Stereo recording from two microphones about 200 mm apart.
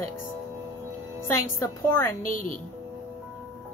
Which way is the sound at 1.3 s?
15° left (ahead or behind).